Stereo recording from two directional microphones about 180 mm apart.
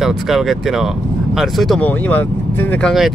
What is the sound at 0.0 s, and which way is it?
Speech, centre (ahead or behind).